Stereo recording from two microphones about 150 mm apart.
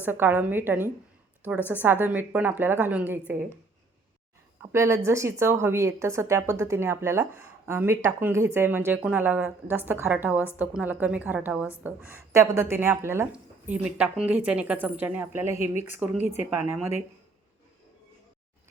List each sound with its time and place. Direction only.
0.0 s a woman's voice: 15° right (ahead or behind)
4.6 s a woman's voice: 20° right (ahead or behind)